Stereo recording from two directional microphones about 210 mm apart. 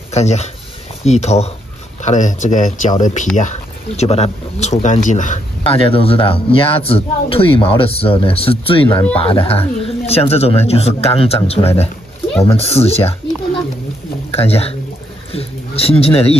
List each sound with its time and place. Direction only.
0.1 s a man's voice: 30° left (ahead or behind)
14.3 s speech: 30° left (ahead or behind)